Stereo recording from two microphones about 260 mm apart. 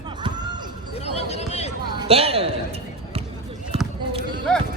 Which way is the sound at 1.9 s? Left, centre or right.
Right.